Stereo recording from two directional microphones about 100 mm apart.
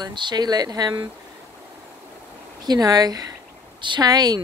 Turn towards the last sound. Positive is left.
turn(degrees=-40)  # may be behind; listen again after turning